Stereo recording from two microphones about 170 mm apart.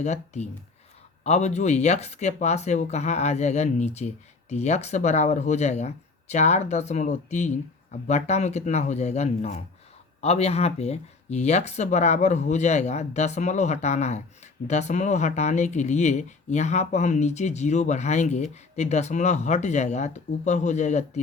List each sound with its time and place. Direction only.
0.0 s speech: 40° left (ahead or behind)